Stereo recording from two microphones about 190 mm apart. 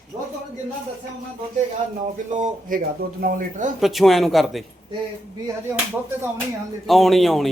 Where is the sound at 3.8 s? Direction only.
Centre (ahead or behind).